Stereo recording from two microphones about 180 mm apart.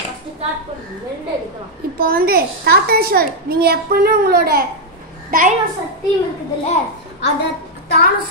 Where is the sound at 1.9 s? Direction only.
55° right (ahead or behind).